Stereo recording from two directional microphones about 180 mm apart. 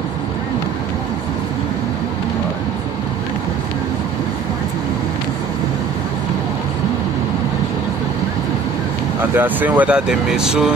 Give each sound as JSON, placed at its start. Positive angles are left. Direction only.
{"t": 9.2, "sound": "speech", "side_deg": -10}